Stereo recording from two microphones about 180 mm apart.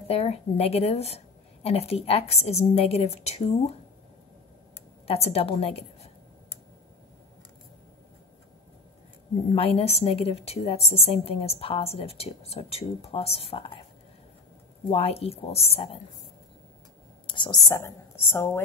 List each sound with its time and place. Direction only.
0.1 s a woman's voice: 35° left (ahead or behind)
5.0 s a woman's voice: 35° left (ahead or behind)
9.5 s a woman's voice: 35° left (ahead or behind)
14.9 s a woman's voice: 35° left (ahead or behind)
17.3 s whispering: 25° left (ahead or behind)
17.6 s a woman's voice: 15° left (ahead or behind)